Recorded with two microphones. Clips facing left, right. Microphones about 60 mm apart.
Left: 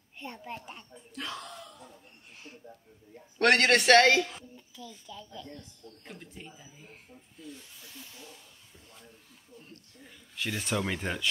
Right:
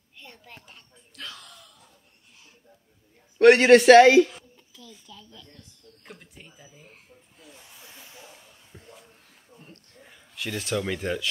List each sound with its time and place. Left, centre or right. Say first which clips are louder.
0.2 s a sound: left 7 dB; left
3.3 s a woman's voice: right 9 dB; centre
5.2 s speech: left 5 dB; centre
6.0 s speech: left 1 dB; centre
7.8 s a sound: right 1 dB; right
10.3 s speech: right 3 dB; centre